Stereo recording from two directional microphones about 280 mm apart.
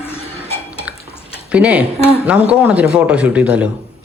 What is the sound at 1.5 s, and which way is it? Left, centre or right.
A woman's voice, centre.